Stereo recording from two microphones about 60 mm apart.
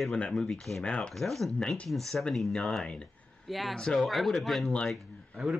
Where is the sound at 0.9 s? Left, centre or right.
Centre.